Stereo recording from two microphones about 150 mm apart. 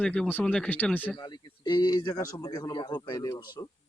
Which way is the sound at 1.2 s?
30° left (ahead or behind).